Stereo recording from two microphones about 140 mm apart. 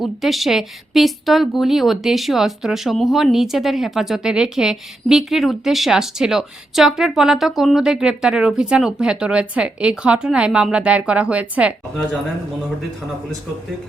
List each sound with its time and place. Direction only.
0.0 s a woman's voice: centre (ahead or behind)